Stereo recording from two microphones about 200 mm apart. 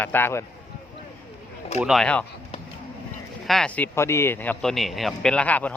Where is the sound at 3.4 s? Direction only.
Centre (ahead or behind).